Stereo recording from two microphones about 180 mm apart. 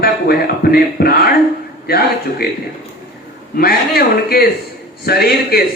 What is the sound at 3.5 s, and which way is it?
Speech, 60° left (ahead or behind).